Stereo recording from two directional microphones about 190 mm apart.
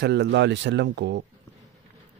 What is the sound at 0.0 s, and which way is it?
Speech, 65° right (ahead or behind).